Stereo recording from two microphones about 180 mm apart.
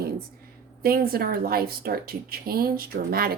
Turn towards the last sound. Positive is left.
turn(degrees=-55)  # may be behind; listen again after turning